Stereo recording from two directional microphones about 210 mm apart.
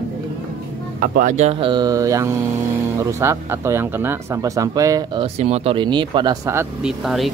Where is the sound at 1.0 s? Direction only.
40° right (ahead or behind); by 7.3 s centre (ahead or behind).